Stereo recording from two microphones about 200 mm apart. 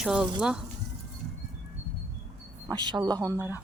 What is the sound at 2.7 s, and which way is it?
Speech, 20° right (ahead or behind).